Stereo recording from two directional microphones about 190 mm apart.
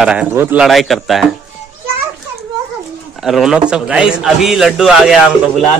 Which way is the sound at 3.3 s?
Centre (ahead or behind).